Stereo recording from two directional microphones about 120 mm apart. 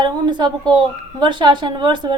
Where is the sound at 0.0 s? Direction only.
35° right (ahead or behind).